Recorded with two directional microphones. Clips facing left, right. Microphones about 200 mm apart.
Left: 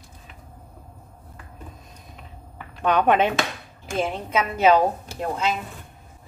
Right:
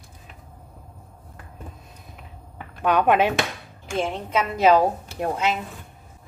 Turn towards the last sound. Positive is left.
turn(degrees=-20)  # may be behind; listen again after turning